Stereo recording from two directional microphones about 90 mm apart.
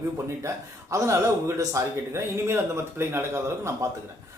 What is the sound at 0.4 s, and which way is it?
Speech, 35° right (ahead or behind).